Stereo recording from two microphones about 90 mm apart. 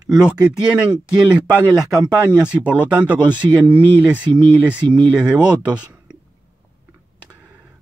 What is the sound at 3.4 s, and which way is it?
Speech, 30° right (ahead or behind).